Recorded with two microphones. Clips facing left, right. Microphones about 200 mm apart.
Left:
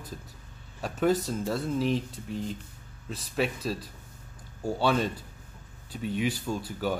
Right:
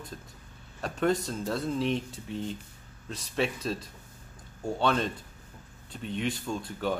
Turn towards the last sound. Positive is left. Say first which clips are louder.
# left 1 dB
turn(degrees=5)  # may be behind; listen again after turning